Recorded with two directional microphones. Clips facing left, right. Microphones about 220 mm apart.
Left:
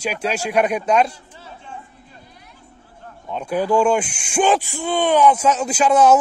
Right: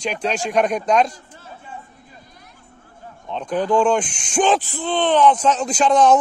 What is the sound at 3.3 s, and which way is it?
Speech, 10° left (ahead or behind).